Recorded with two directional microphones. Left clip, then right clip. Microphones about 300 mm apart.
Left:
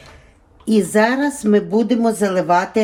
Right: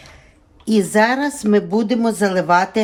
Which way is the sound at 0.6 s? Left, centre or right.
Right.